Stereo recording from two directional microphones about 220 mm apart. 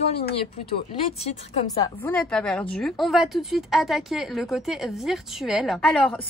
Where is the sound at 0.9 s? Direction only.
25° left (ahead or behind).